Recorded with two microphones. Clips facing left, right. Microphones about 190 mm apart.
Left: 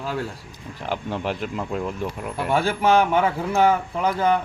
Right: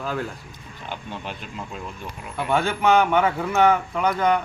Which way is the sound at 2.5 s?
30° left (ahead or behind).